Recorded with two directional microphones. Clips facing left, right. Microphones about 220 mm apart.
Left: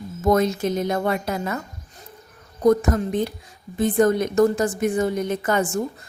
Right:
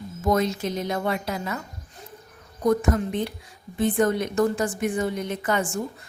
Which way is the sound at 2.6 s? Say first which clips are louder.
Left 4 dB; 40° left (ahead or behind).